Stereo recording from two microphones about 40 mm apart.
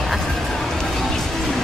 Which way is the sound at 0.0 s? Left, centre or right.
Centre.